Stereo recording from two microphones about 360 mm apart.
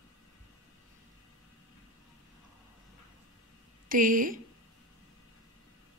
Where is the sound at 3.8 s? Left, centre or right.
Right.